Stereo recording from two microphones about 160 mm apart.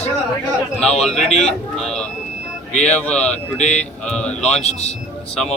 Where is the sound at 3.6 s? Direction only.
45° left (ahead or behind).